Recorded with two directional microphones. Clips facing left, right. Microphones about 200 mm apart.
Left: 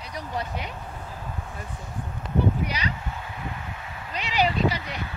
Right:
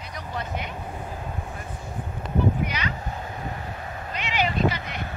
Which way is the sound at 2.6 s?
35° left (ahead or behind).